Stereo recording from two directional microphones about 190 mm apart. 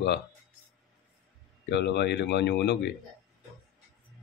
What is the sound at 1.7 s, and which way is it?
Speech, 65° left (ahead or behind).